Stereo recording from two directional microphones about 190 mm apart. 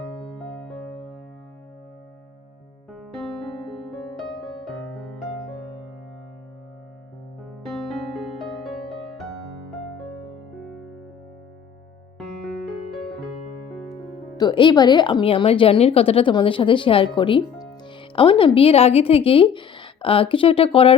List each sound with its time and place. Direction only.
0.6 s music: centre (ahead or behind)
2.9 s music: centre (ahead or behind)
7.7 s music: centre (ahead or behind)
14.3 s speech: 25° left (ahead or behind)